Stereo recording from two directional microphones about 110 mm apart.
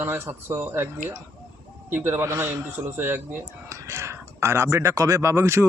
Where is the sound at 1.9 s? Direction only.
25° right (ahead or behind).